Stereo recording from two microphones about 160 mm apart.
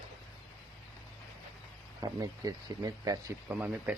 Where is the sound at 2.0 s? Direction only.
25° right (ahead or behind).